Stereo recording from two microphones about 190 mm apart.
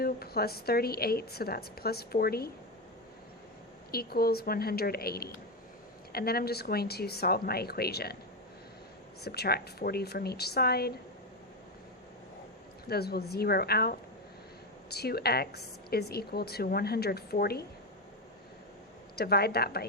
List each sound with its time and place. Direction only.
0.0 s a woman's voice: 55° left (ahead or behind)
3.9 s a woman's voice: 55° left (ahead or behind)
9.2 s a woman's voice: 55° left (ahead or behind)
12.9 s a woman's voice: 55° left (ahead or behind)
19.1 s a woman's voice: 55° left (ahead or behind)